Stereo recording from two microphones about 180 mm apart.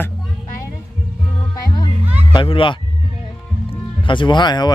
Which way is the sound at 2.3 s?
30° left (ahead or behind).